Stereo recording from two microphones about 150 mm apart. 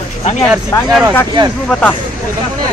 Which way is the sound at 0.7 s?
20° left (ahead or behind).